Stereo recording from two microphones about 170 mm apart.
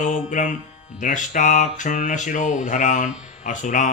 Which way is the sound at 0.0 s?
50° left (ahead or behind).